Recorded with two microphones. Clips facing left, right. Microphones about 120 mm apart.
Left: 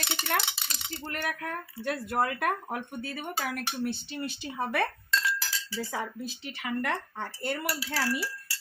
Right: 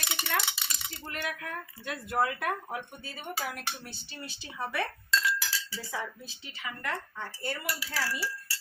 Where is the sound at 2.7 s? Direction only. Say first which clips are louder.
Left 4 dB; 55° left (ahead or behind).